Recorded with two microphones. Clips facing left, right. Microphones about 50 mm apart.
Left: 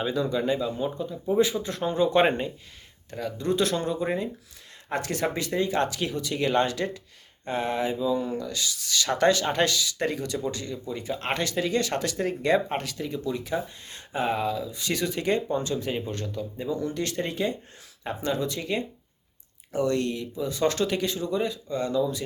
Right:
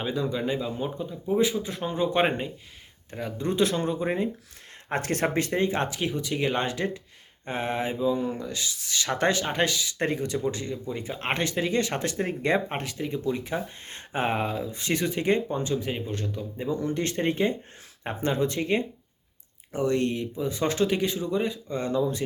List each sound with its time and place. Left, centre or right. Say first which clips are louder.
0.0 s speech: left 2 dB; centre
1.1 s speech: even; centre
3.1 s speech: left 2 dB; right
4.9 s speech: right 1 dB; right
5.5 s speech: even; right; by 16.6 s centre
16.6 s speech: right 2 dB; right
19.7 s speech: even; centre